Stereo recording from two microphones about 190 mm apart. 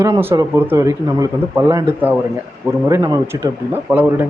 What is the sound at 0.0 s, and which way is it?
A man's voice, 15° right (ahead or behind).